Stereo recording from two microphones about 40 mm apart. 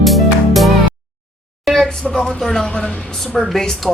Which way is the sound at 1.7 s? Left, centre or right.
Centre.